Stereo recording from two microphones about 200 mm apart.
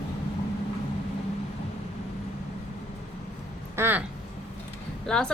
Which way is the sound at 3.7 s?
10° right (ahead or behind).